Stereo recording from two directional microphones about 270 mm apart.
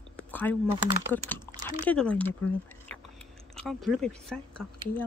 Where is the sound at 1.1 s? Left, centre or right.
Centre.